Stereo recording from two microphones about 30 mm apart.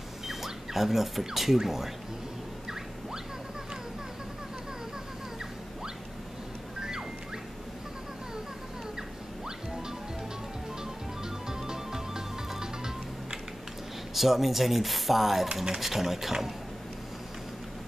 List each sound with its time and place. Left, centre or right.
0.3 s speech: centre
6.8 s music: right
10.8 s music: right
14.1 s speech: centre